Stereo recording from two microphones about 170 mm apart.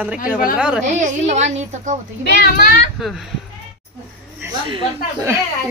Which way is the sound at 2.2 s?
70° left (ahead or behind).